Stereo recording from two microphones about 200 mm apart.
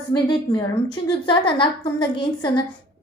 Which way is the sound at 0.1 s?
20° left (ahead or behind).